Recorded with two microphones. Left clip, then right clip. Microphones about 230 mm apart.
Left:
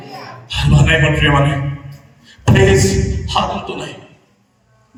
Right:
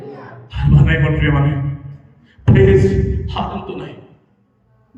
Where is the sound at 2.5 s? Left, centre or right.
Centre.